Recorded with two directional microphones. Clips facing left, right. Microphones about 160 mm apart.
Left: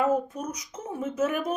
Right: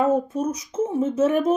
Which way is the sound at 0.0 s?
25° right (ahead or behind).